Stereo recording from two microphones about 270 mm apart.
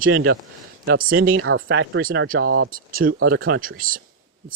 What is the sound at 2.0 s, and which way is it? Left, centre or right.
Speech, right.